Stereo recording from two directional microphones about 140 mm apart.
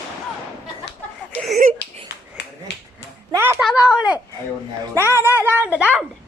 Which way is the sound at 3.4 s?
15° right (ahead or behind).